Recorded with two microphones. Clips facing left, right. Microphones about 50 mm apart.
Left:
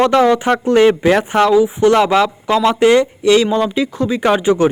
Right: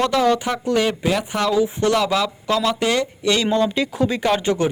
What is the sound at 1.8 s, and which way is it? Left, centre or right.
A man's voice, left.